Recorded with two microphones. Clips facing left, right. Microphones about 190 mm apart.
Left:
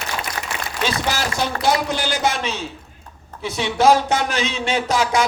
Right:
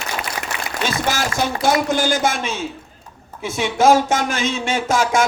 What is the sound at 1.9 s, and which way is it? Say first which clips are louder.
Speech: right 3 dB; 50° right (ahead or behind).